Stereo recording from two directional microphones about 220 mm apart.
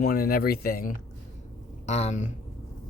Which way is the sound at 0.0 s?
45° left (ahead or behind).